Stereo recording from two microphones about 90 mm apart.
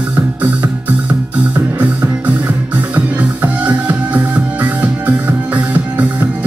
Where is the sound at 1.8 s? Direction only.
15° right (ahead or behind).